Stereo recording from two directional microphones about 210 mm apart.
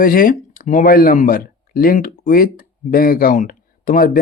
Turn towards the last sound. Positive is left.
turn(degrees=40)  # may be behind; listen again after turning